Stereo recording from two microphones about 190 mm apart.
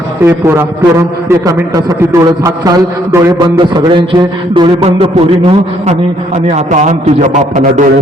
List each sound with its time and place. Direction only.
0.3 s a man's voice: 15° right (ahead or behind); by 7.9 s 40° right (ahead or behind)